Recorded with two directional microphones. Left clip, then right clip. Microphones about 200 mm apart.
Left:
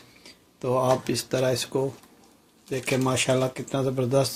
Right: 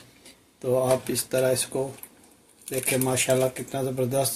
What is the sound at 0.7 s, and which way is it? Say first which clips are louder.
Speech: even; 55° left (ahead or behind).